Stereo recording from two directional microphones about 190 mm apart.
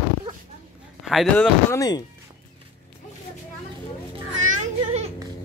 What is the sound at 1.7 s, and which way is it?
Speech, 20° left (ahead or behind).